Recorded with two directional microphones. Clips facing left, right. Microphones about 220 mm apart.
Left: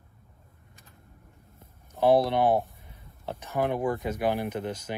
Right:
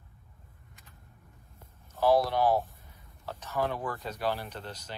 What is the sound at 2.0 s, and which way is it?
Speech, 25° left (ahead or behind).